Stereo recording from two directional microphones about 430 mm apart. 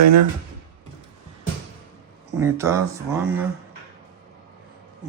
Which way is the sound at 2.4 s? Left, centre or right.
Centre.